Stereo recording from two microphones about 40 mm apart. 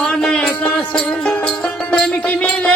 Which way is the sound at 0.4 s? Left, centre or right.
Left.